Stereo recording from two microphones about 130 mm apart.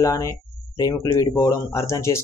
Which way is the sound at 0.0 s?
25° left (ahead or behind).